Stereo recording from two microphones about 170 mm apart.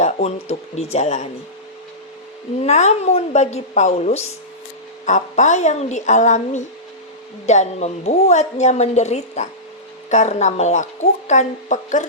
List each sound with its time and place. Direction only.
0.0 s a woman's voice: 40° left (ahead or behind)
2.6 s a woman's voice: 40° left (ahead or behind)